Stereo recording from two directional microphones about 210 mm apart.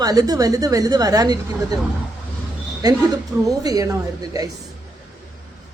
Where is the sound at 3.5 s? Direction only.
15° right (ahead or behind).